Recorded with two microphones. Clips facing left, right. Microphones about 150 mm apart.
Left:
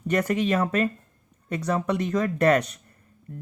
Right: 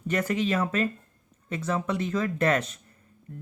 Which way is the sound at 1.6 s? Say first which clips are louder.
Left 3 dB; 60° left (ahead or behind).